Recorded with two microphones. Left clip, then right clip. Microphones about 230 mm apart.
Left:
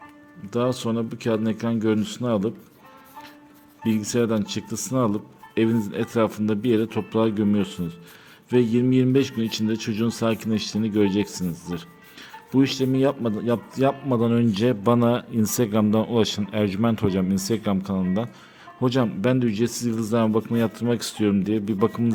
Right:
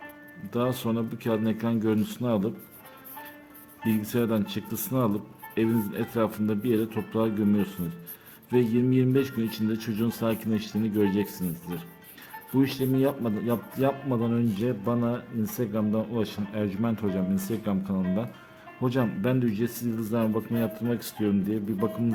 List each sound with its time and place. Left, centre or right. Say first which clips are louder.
0.5 s speech: left 4 dB; centre
3.8 s a man's voice: left 4 dB; centre